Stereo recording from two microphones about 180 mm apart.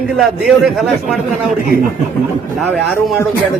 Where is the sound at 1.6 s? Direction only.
50° right (ahead or behind).